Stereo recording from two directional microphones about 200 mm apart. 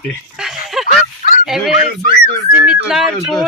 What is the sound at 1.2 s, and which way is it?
Fowl, 40° left (ahead or behind).